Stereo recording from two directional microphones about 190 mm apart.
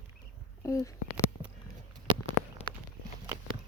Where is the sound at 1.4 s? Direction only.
30° right (ahead or behind).